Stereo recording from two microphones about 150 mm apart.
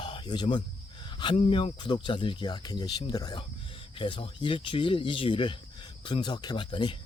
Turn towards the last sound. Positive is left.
turn(degrees=30)  # may be behind; listen again after turning